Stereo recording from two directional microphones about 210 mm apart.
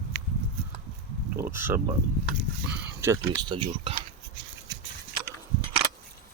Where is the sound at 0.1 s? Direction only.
50° right (ahead or behind).